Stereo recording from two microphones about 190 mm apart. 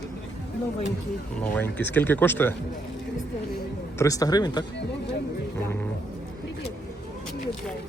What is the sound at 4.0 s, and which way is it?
Speech, 20° left (ahead or behind).